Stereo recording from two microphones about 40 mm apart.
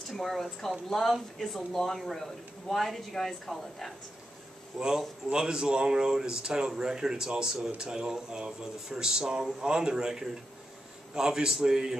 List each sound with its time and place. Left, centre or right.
0.1 s a woman's voice: centre
4.7 s speech: right